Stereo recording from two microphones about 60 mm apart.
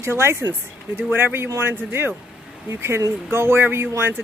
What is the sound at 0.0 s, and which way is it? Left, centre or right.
Speech, right.